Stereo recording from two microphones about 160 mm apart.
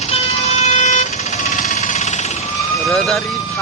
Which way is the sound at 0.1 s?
45° left (ahead or behind).